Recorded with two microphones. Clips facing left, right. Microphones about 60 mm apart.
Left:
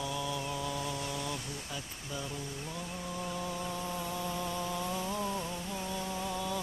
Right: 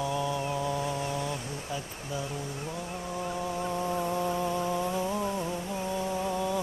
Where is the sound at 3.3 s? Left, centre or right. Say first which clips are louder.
Right 7 dB; right.